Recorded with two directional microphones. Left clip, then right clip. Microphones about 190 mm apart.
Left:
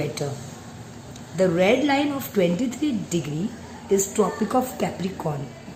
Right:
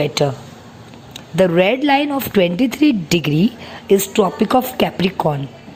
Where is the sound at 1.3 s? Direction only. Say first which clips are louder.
Right 5 dB; 35° right (ahead or behind).